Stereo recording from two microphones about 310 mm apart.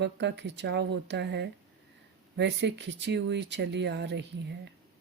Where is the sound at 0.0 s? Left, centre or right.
Right.